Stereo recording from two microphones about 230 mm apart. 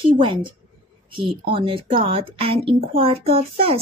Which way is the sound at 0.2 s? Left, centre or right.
Right.